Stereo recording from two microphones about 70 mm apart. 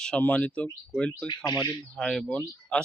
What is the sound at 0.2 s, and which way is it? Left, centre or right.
Speech, left.